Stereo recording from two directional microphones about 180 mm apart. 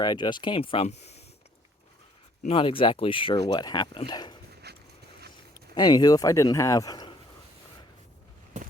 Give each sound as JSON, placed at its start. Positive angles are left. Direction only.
{"t": 0.0, "sound": "speech", "side_deg": 25}
{"t": 2.5, "sound": "speech", "side_deg": 30}
{"t": 4.7, "sound": "dog", "side_deg": -65}
{"t": 5.7, "sound": "speech", "side_deg": 20}
{"t": 8.5, "sound": "a sound", "side_deg": -40}